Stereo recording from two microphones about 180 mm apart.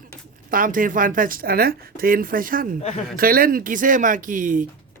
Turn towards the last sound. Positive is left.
turn(degrees=-45)  # may be behind; listen again after turning